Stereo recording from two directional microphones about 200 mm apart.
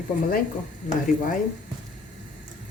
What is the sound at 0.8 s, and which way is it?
Speech, 35° left (ahead or behind).